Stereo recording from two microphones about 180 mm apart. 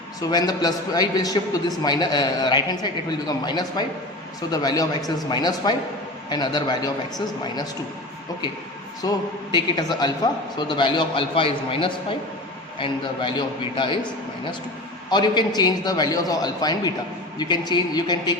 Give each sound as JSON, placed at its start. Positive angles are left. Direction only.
{"t": 0.2, "sound": "a man's voice", "side_deg": 20}
{"t": 9.0, "sound": "a man's voice", "side_deg": 20}
{"t": 15.1, "sound": "a man's voice", "side_deg": 25}